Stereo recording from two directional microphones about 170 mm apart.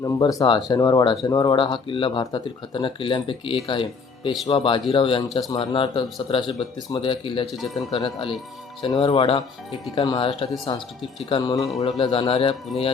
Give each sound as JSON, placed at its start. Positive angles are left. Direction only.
{"t": 0.0, "sound": "speech", "side_deg": 20}
{"t": 7.5, "sound": "a man's voice", "side_deg": 0}
{"t": 7.9, "sound": "speech", "side_deg": 35}
{"t": 11.5, "sound": "a man's voice", "side_deg": 0}
{"t": 11.8, "sound": "speech", "side_deg": 35}